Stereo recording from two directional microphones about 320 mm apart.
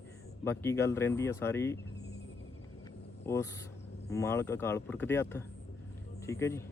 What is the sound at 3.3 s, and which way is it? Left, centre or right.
Speech, centre.